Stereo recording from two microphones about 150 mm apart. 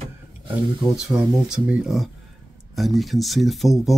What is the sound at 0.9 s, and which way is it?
Speech, 5° right (ahead or behind).